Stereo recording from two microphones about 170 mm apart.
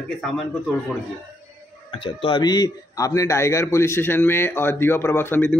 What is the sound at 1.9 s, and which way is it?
A man's voice, 30° left (ahead or behind).